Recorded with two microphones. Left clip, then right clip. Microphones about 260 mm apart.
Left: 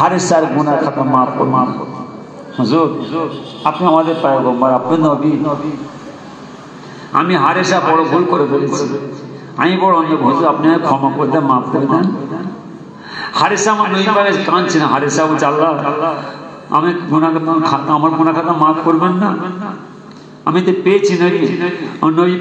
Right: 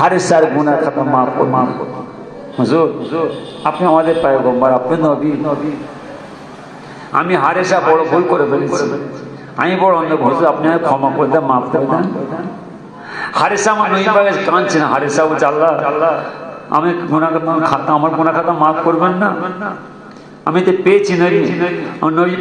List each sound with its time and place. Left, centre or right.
0.0 s a man's voice: right
7.1 s a man's voice: right
13.1 s a man's voice: right